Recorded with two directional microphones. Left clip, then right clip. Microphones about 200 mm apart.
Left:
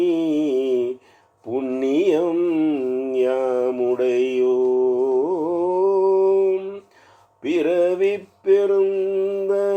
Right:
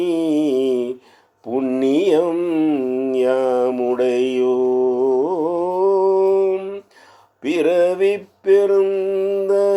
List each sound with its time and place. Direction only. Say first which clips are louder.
0.0 s mantra: right 2 dB; 25° right (ahead or behind)
5.1 s music: right 2 dB; 25° right (ahead or behind)
5.7 s mantra: right 2 dB; 25° right (ahead or behind)
7.4 s music: right 3 dB; 25° right (ahead or behind)